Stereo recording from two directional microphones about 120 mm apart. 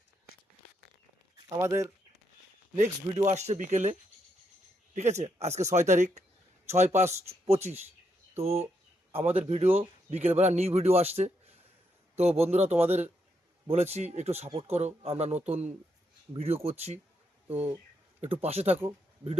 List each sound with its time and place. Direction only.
1.5 s speech: 25° right (ahead or behind)
3.2 s speech: 70° right (ahead or behind); by 3.9 s 90° right
4.9 s speech: 70° right (ahead or behind)
6.7 s speech: 70° right (ahead or behind)
7.3 s speech: 60° right (ahead or behind)
16.3 s speech: 55° right (ahead or behind)
17.5 s speech: 15° right (ahead or behind)
18.4 s speech: 60° right (ahead or behind)